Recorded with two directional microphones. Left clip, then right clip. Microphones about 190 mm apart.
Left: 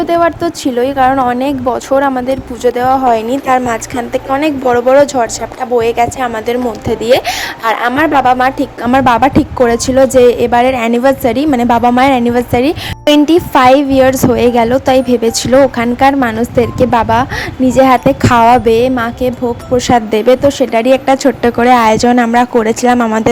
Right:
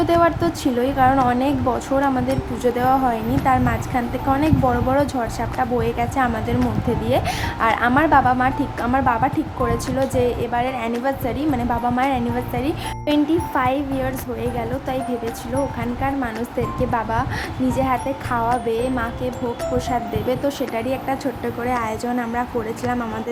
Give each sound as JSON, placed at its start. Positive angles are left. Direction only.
{"t": 0.0, "sound": "a woman's voice", "side_deg": 40}